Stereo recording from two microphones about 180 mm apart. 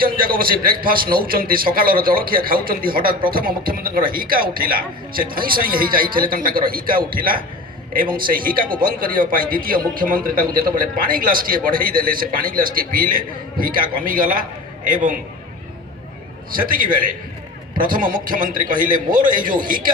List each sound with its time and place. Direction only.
0.0 s a man's voice: 55° right (ahead or behind)
16.5 s a man's voice: 50° right (ahead or behind)